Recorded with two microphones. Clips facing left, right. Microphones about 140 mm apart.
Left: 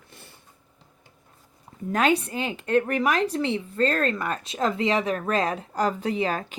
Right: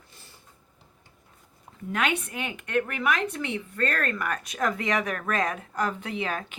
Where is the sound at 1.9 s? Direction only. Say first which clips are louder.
Left 6 dB; 35° left (ahead or behind).